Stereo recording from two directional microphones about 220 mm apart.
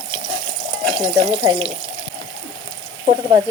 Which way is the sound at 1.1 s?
25° right (ahead or behind).